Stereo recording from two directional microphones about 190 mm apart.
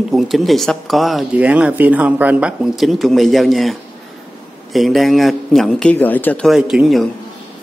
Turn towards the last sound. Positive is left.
turn(degrees=0)  # may be behind; listen again after turning